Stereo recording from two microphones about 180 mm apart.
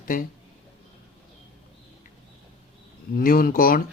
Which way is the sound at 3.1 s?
50° left (ahead or behind).